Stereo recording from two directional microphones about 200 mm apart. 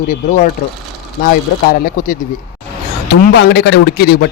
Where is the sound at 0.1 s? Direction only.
40° left (ahead or behind).